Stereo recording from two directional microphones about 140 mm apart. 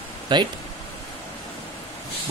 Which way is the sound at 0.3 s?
30° right (ahead or behind).